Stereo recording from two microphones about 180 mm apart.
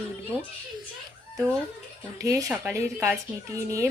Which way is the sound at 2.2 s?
15° right (ahead or behind).